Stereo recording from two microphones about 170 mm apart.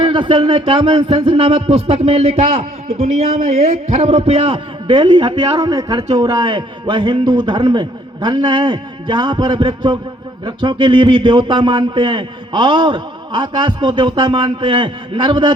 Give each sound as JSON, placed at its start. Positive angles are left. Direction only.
{"t": 0.0, "sound": "a man's voice", "side_deg": -30}